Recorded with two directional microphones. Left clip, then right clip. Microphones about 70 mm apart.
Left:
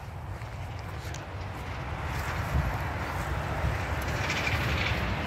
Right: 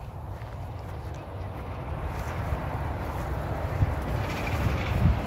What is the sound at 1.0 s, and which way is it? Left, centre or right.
Vehicle, centre.